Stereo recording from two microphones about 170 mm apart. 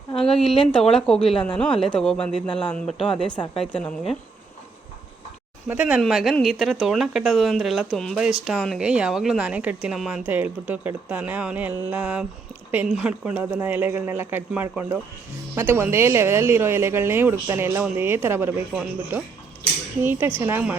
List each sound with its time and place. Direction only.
0.7 s speech: 5° left (ahead or behind)
3.3 s a woman's voice: 25° left (ahead or behind)
3.6 s speech: 5° left (ahead or behind)
5.6 s speech: 10° right (ahead or behind)
18.7 s speech: 5° right (ahead or behind)